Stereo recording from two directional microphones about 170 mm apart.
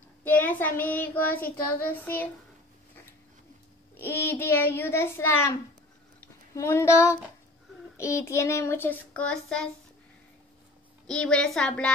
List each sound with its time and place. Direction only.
0.2 s child singing: 10° left (ahead or behind)
3.9 s child singing: 10° left (ahead or behind)
6.2 s a woman's voice: 15° left (ahead or behind)
8.0 s child singing: 15° left (ahead or behind)
11.1 s a woman's voice: 5° left (ahead or behind)